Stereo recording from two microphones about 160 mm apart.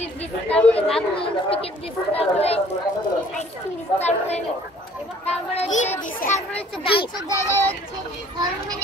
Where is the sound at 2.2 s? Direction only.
40° left (ahead or behind).